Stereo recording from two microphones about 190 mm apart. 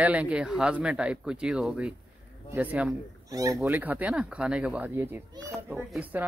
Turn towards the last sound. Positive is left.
turn(degrees=-10)  # may be behind; listen again after turning